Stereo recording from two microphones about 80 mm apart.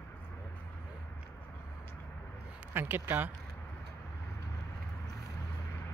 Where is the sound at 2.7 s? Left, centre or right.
Right.